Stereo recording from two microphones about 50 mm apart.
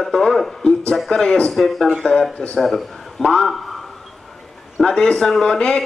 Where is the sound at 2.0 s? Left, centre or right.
Centre.